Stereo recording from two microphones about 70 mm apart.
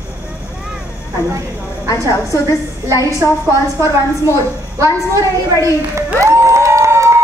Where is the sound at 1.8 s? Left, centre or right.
Left.